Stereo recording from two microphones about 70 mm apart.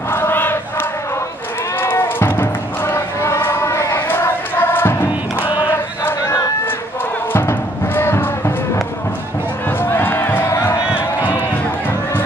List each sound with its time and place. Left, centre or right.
0.1 s crowd: left
1.8 s music: left
3.4 s choir: left
5.7 s battle cry: left
7.3 s music: left
9.7 s music: left